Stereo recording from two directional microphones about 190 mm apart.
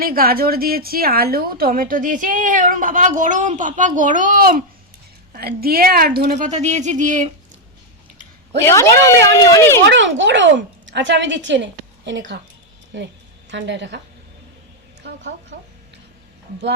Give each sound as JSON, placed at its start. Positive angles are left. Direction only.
{"t": 0.0, "sound": "a woman's voice", "side_deg": -50}
{"t": 8.6, "sound": "speech", "side_deg": 15}
{"t": 9.8, "sound": "speech", "side_deg": -70}
{"t": 13.5, "sound": "speech", "side_deg": -70}
{"t": 15.0, "sound": "speech", "side_deg": -75}